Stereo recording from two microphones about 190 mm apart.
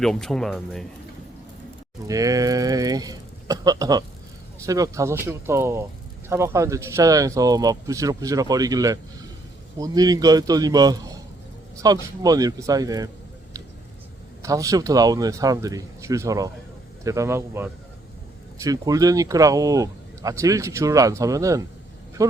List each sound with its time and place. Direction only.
0.0 s speech: centre (ahead or behind)
2.0 s speech: 20° right (ahead or behind)
14.4 s speech: 15° right (ahead or behind)